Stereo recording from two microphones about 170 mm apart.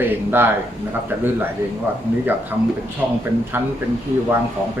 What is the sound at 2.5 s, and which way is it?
Speech, 10° right (ahead or behind).